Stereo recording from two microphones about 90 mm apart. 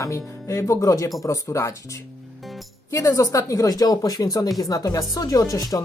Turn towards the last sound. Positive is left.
turn(degrees=40)  # may be behind; listen again after turning